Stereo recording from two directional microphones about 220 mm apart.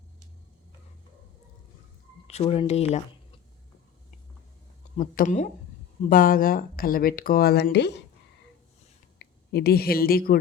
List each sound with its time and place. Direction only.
2.2 s speech: 30° left (ahead or behind)
4.9 s speech: 35° left (ahead or behind)
9.1 s speech: 45° left (ahead or behind)